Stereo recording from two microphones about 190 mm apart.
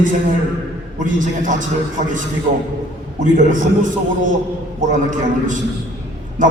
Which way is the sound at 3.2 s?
45° right (ahead or behind).